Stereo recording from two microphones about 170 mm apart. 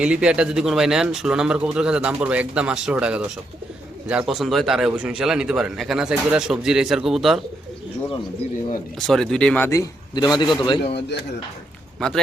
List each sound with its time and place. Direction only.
0.0 s speech: 5° right (ahead or behind)
9.0 s speech: centre (ahead or behind)
9.6 s a man's voice: 20° left (ahead or behind)
11.9 s speech: 5° left (ahead or behind)